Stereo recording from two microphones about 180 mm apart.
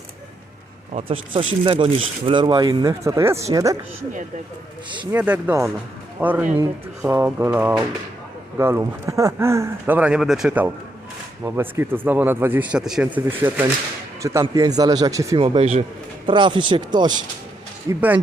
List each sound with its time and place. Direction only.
0.9 s speech: 30° right (ahead or behind)
5.1 s speech: 10° right (ahead or behind)
15.4 s speech: 30° right (ahead or behind)
17.8 s speech: 10° right (ahead or behind)